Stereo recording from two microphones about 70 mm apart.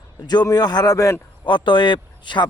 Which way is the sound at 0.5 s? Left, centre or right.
Left.